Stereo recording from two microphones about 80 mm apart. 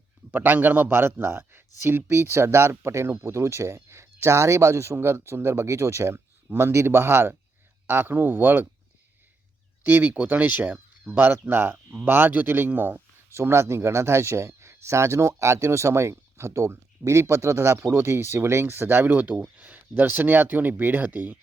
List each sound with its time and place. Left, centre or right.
0.3 s speech: right
9.8 s speech: right